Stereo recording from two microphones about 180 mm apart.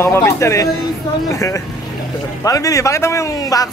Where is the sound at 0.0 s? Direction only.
15° left (ahead or behind).